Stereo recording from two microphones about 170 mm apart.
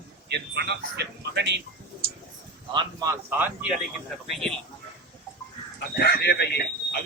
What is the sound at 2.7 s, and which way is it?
Speech, 20° right (ahead or behind).